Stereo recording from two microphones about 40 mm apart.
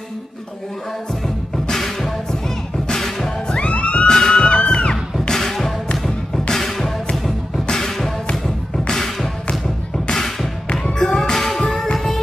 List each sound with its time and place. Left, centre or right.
1.2 s music: centre
3.4 s music: left
5.3 s music: centre
10.7 s music: left